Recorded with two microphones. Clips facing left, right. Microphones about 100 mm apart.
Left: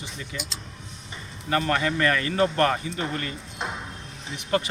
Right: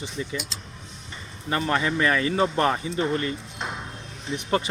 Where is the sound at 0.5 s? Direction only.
Centre (ahead or behind).